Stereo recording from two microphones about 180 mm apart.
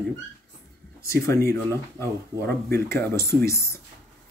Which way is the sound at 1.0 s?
15° left (ahead or behind).